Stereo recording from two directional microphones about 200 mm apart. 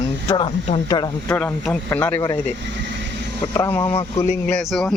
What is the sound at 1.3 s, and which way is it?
Speech, 5° left (ahead or behind).